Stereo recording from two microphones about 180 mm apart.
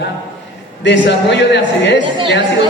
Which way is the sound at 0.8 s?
80° left.